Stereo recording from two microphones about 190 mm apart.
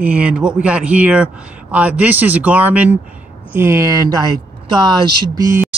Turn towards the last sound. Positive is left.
turn(degrees=-15)  # may be behind; listen again after turning